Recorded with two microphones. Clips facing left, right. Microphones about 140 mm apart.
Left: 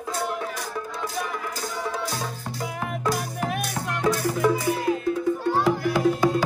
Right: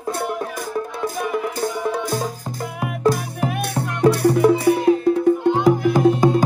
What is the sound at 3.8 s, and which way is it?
Music, 15° right (ahead or behind).